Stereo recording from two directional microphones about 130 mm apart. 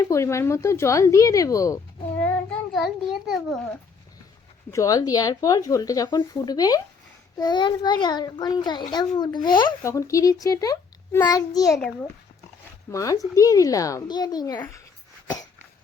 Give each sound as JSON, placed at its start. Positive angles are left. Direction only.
{"t": 0.0, "sound": "speech", "side_deg": 20}
{"t": 2.1, "sound": "a sound", "side_deg": 10}
{"t": 4.7, "sound": "a child's voice", "side_deg": 25}
{"t": 9.8, "sound": "speech", "side_deg": 25}
{"t": 12.9, "sound": "speech", "side_deg": 25}